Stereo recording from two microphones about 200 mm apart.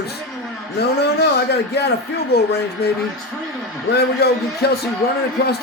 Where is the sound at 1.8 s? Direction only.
55° left (ahead or behind).